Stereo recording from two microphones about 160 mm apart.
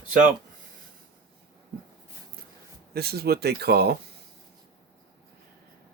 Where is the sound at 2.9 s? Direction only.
75° right (ahead or behind).